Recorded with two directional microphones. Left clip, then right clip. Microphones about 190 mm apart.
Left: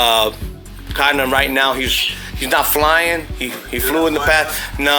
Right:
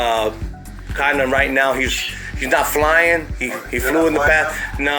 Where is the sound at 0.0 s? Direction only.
25° left (ahead or behind).